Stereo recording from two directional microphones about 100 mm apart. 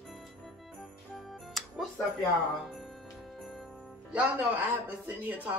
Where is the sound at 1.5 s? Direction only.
Centre (ahead or behind).